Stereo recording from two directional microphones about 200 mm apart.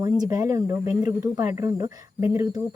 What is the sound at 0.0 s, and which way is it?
Speech, 20° right (ahead or behind).